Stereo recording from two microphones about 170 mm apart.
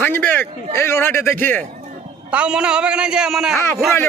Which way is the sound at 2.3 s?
5° right (ahead or behind).